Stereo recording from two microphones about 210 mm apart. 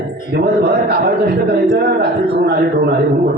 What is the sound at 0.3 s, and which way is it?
A man's voice, 50° right (ahead or behind).